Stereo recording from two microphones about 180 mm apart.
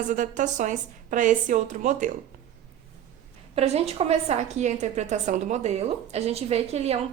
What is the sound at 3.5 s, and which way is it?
A woman's voice, 35° right (ahead or behind).